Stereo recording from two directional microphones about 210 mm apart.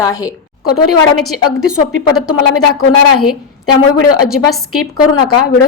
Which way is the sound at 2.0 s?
90° left.